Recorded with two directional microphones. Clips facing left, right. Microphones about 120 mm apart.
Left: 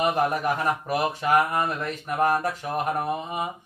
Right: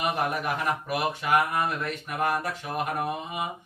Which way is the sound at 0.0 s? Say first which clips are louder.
Left 4 dB; 35° left (ahead or behind).